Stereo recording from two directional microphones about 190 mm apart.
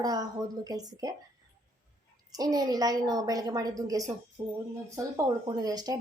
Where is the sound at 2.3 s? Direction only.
20° right (ahead or behind).